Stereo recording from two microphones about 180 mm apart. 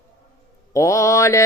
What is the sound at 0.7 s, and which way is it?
Music, 15° left (ahead or behind).